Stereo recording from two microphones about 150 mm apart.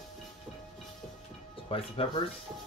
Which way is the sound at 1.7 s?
40° left (ahead or behind).